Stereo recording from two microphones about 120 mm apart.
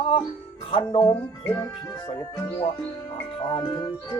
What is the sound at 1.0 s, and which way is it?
Speech, 25° left (ahead or behind).